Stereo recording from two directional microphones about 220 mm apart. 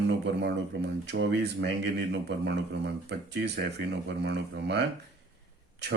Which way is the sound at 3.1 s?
50° right (ahead or behind).